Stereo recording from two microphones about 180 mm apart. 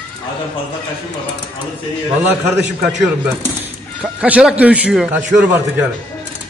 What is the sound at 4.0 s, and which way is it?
A man's voice, 5° right (ahead or behind).